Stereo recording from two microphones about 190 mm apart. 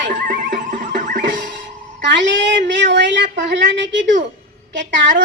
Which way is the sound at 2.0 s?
70° right (ahead or behind).